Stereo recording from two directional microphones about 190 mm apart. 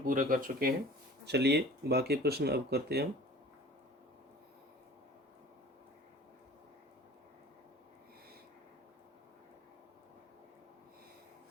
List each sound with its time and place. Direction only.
0.0 s speech: 45° right (ahead or behind)
1.2 s speech: 60° right (ahead or behind)